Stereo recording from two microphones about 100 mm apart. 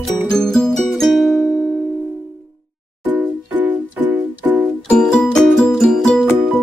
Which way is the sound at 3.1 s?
20° right (ahead or behind).